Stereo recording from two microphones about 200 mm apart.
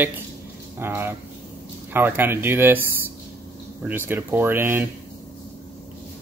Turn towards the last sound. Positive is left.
turn(degrees=-10)  # may be behind; listen again after turning